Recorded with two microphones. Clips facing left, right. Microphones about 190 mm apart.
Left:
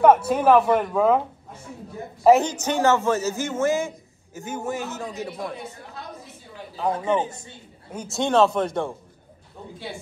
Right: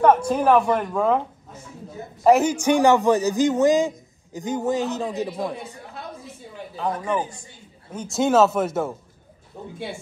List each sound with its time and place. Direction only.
0.0 s a man's voice: 5° left (ahead or behind)
2.2 s a man's voice: centre (ahead or behind)
2.5 s a man's voice: 15° right (ahead or behind)
6.9 s a man's voice: 25° left (ahead or behind)
7.9 s speech: 10° left (ahead or behind)
8.2 s a man's voice: 5° right (ahead or behind)